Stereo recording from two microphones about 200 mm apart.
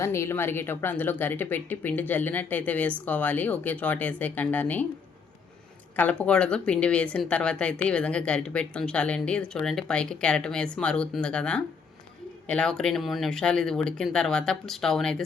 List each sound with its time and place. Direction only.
0.0 s speech: 15° left (ahead or behind)
6.0 s speech: 5° left (ahead or behind)